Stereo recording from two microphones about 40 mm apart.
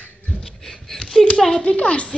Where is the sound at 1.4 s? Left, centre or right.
Centre.